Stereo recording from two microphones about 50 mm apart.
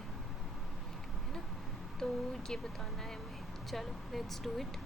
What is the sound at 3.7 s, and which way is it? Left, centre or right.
Speech, centre.